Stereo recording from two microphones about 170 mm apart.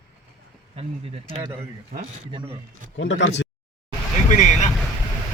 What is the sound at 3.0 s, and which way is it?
Speech, 90° left.